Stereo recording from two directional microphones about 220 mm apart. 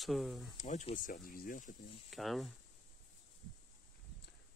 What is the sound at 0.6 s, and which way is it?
Speech, 30° left (ahead or behind).